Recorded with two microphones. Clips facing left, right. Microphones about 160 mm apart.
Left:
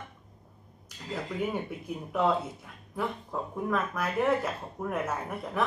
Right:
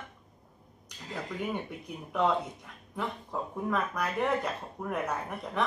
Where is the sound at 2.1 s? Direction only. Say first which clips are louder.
Left 1 dB; 5° left (ahead or behind).